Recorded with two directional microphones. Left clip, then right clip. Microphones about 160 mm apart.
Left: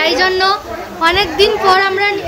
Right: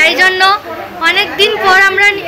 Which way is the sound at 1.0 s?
35° left (ahead or behind).